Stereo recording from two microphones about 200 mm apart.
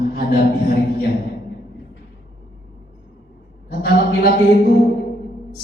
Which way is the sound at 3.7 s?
50° left (ahead or behind).